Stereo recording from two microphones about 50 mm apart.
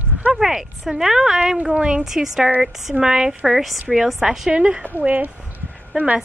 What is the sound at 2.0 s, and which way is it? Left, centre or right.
Speech, centre.